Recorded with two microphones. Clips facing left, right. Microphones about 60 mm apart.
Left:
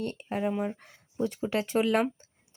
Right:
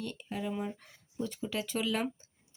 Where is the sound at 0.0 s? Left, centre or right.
Left.